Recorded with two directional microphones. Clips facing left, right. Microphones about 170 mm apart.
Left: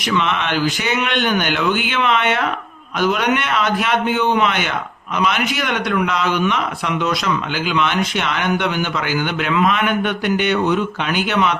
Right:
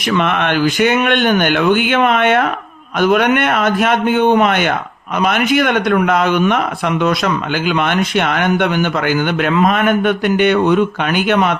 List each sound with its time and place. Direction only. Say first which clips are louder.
0.1 s a man's voice: right 4 dB; 55° right (ahead or behind)